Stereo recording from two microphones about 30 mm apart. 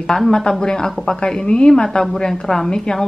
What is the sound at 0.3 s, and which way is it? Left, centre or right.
Speech, left.